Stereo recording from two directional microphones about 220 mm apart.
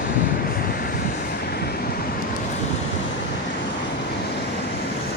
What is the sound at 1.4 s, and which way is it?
Vehicle, 45° left (ahead or behind).